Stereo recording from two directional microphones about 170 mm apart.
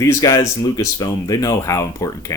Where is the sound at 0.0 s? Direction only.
20° left (ahead or behind).